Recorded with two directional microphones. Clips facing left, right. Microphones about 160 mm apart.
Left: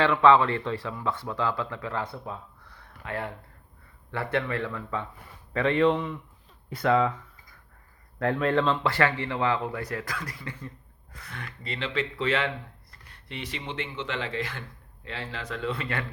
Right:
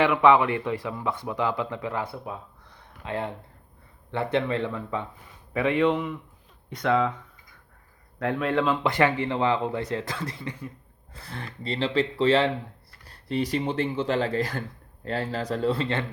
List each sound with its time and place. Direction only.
0.0 s speech: 15° right (ahead or behind)
5.5 s speech: 5° right (ahead or behind)
8.2 s speech: centre (ahead or behind)
8.8 s speech: 20° right (ahead or behind)
11.1 s speech: 30° right (ahead or behind)